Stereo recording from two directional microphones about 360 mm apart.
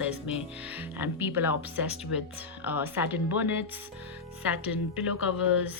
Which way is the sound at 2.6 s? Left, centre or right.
Centre.